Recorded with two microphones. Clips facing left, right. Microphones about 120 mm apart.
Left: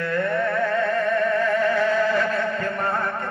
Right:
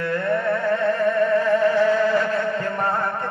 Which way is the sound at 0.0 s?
25° right (ahead or behind).